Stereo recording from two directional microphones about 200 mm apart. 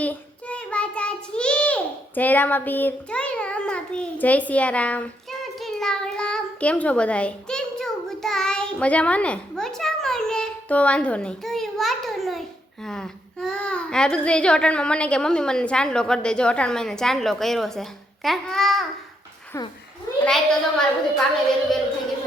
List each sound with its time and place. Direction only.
0.0 s child singing: 5° left (ahead or behind)
5.5 s a sound: centre (ahead or behind)
19.5 s a child's voice: 15° left (ahead or behind)
20.2 s a woman's voice: 5° left (ahead or behind)